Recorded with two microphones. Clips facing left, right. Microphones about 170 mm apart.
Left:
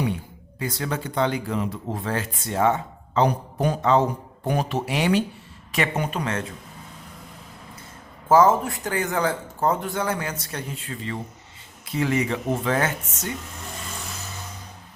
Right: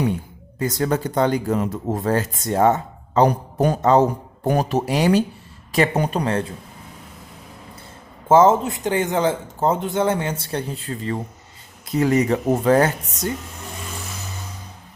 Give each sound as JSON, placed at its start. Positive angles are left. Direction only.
{"t": 0.6, "sound": "speech", "side_deg": -45}
{"t": 8.3, "sound": "speech", "side_deg": -25}